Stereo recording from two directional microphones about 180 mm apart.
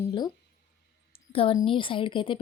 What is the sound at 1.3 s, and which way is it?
A woman's voice, 30° left (ahead or behind).